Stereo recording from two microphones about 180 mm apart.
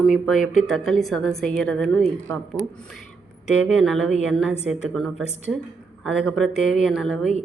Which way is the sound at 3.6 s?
Centre (ahead or behind).